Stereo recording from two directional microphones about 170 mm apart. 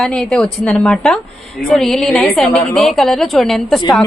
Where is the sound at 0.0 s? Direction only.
5° left (ahead or behind).